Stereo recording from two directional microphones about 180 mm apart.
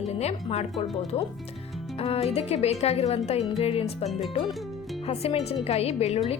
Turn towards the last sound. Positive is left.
turn(degrees=35)  # may be behind; listen again after turning